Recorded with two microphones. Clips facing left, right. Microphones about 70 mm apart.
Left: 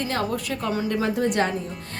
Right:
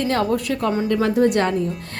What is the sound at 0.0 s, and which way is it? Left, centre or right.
A woman's voice, right.